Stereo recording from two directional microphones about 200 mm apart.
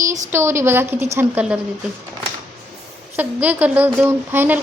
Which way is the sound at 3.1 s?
10° right (ahead or behind).